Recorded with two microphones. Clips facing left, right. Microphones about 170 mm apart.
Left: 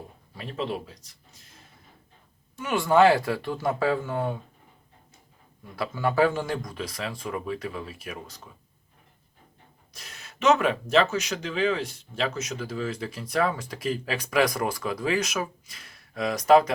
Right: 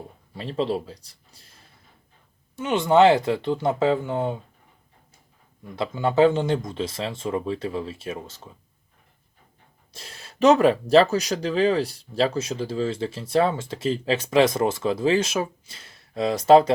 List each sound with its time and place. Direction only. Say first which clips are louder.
0.3 s speech: right 6 dB; 30° right (ahead or behind)
2.6 s speech: right 3 dB; 20° right (ahead or behind)
5.7 s speech: right 4 dB; 20° right (ahead or behind)
9.9 s speech: right 4 dB; 30° right (ahead or behind)